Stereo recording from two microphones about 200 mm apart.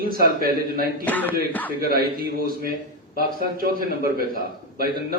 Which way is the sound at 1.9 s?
50° right (ahead or behind).